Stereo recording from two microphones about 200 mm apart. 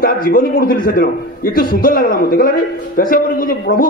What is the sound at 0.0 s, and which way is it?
A man's voice, 45° left (ahead or behind).